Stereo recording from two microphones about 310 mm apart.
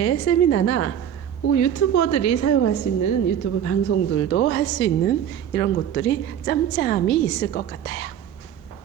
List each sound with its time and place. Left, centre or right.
0.0 s a woman's voice: left
1.5 s a woman's voice: left
3.0 s a woman's voice: left
3.6 s a woman's voice: left